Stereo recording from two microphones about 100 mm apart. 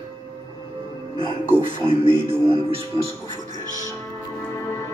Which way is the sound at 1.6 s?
60° right (ahead or behind).